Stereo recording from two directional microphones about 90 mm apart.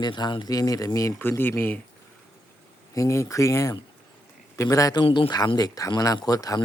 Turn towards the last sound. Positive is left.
turn(degrees=45)  # may be behind; listen again after turning